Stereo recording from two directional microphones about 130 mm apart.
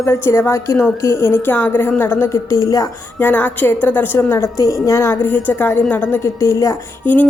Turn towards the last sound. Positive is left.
turn(degrees=15)  # may be behind; listen again after turning